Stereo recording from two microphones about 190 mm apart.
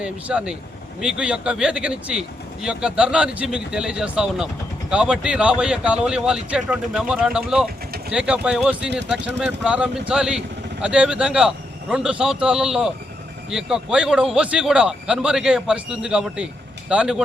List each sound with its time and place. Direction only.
0.0 s speech: 5° right (ahead or behind)